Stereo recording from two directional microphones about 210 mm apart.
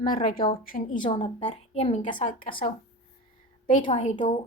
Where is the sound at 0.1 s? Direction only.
45° left (ahead or behind).